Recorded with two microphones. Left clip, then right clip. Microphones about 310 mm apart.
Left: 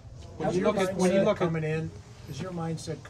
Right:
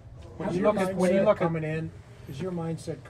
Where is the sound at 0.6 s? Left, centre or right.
Right.